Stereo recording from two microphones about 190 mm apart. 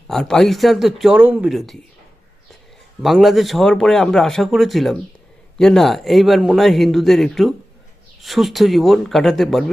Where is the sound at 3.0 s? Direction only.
Centre (ahead or behind).